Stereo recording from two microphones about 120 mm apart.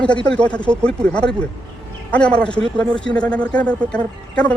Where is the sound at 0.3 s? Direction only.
10° left (ahead or behind).